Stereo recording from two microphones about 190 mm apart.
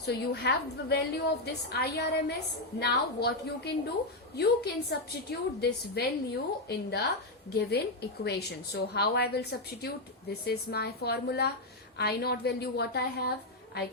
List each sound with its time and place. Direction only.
0.0 s a woman's voice: 60° left (ahead or behind)